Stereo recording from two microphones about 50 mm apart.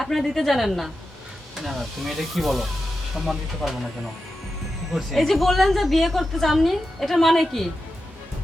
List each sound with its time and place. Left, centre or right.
0.0 s a woman's voice: centre
4.9 s a woman's voice: centre